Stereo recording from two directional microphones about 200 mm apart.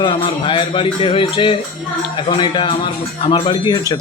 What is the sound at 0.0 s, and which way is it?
Music, 20° left (ahead or behind).